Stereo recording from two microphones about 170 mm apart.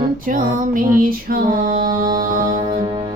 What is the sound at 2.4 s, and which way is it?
Music, 25° right (ahead or behind).